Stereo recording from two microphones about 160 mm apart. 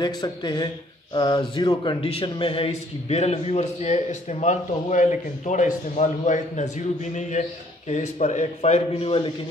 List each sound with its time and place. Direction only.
0.0 s a man's voice: 25° left (ahead or behind)